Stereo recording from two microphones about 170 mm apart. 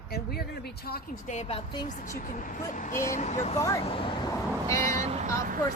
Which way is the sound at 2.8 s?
50° left (ahead or behind).